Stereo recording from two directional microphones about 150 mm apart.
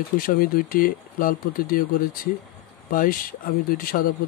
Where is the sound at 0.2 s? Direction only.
75° left (ahead or behind).